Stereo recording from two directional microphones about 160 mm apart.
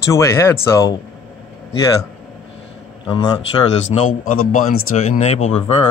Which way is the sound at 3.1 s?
25° left (ahead or behind).